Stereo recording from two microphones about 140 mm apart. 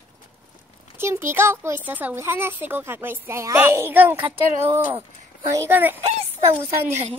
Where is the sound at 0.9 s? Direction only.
20° right (ahead or behind).